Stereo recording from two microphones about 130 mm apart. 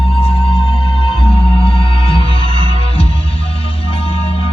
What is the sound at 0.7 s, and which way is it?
Music, 45° left (ahead or behind).